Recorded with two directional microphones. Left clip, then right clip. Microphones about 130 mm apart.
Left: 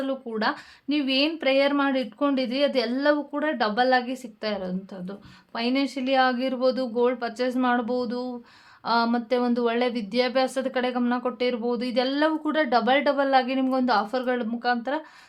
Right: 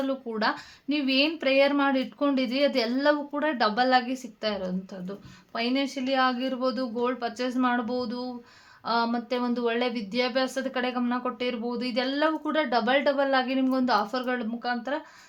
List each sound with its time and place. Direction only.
0.0 s speech: 20° left (ahead or behind); by 15.0 s 35° left (ahead or behind)